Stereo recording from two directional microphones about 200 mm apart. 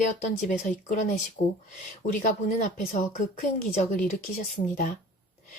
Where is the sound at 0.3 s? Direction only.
35° left (ahead or behind).